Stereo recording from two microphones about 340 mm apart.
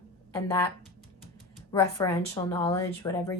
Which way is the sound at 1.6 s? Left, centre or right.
Centre.